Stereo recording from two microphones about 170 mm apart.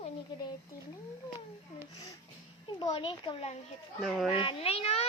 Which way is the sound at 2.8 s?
30° left (ahead or behind).